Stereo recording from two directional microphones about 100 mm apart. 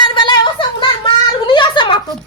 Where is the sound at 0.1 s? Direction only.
55° left (ahead or behind).